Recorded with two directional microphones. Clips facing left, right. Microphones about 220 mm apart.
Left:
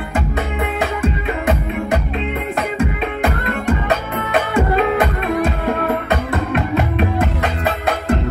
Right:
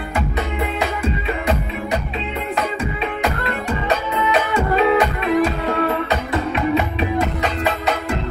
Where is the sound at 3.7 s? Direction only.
50° left (ahead or behind).